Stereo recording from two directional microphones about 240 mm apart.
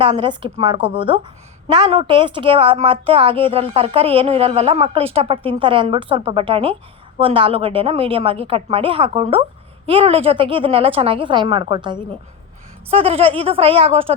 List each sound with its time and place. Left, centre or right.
0.0 s a woman's voice: right